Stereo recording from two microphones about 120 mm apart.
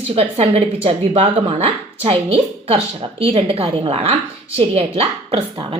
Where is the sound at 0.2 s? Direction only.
55° right (ahead or behind).